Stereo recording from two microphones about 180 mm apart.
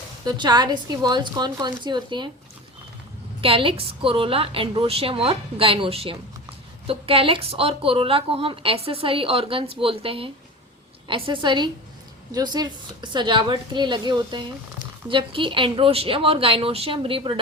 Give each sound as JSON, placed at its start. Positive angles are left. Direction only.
{"t": 0.3, "sound": "a woman's voice", "side_deg": -25}
{"t": 3.4, "sound": "a woman's voice", "side_deg": -30}